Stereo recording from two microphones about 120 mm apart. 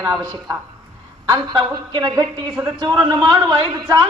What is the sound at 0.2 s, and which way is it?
A woman's voice, 40° right (ahead or behind).